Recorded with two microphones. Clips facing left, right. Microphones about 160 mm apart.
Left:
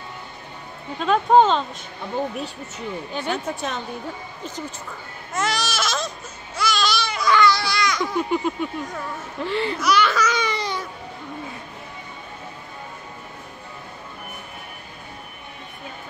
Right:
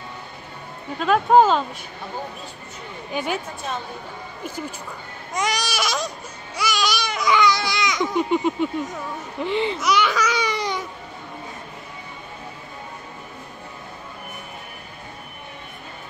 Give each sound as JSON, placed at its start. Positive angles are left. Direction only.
{"t": 0.9, "sound": "speech", "side_deg": -5}
{"t": 3.1, "sound": "speech", "side_deg": -10}
{"t": 4.4, "sound": "speech", "side_deg": -10}
{"t": 5.3, "sound": "baby cry", "side_deg": -15}
{"t": 9.4, "sound": "speech", "side_deg": -20}